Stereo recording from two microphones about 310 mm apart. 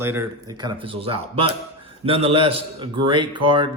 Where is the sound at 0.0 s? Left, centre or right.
Centre.